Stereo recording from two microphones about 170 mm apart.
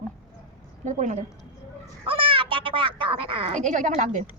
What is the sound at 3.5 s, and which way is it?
Speech, 45° right (ahead or behind).